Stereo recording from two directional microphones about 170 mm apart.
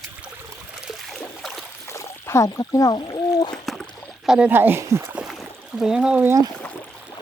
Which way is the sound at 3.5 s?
5° left (ahead or behind).